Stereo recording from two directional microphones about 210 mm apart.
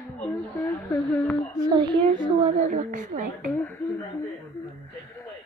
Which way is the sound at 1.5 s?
20° right (ahead or behind).